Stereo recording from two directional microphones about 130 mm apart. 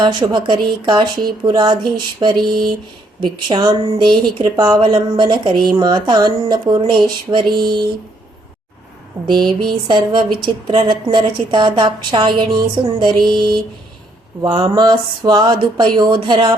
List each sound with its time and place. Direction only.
0.0 s speech: 35° right (ahead or behind)
9.2 s speech: 35° right (ahead or behind)